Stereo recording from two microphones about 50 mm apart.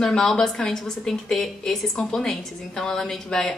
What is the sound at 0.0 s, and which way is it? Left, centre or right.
Speech, centre.